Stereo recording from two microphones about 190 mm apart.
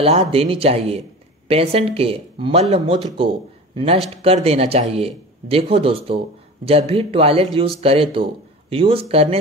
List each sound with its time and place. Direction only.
0.0 s a man's voice: 30° right (ahead or behind)